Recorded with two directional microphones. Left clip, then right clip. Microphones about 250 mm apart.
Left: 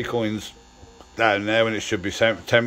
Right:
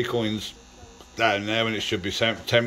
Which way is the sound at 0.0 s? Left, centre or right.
Centre.